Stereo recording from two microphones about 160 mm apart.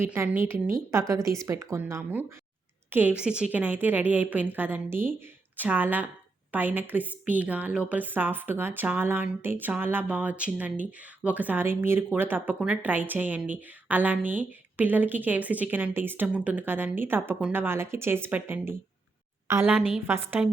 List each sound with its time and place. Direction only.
0.0 s a woman's voice: 15° right (ahead or behind)